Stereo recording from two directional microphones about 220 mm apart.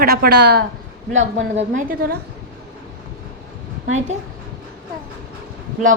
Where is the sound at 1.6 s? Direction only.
35° right (ahead or behind).